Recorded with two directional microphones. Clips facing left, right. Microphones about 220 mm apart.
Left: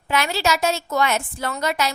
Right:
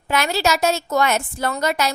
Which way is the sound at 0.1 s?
40° right (ahead or behind).